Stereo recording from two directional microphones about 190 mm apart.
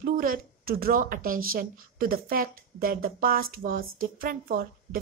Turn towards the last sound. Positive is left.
turn(degrees=-50)  # may be behind; listen again after turning